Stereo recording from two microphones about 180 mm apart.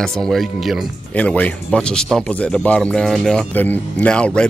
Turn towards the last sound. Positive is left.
turn(degrees=5)  # may be behind; listen again after turning